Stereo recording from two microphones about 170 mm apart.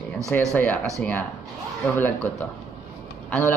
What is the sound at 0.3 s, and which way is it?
Speech, 5° left (ahead or behind).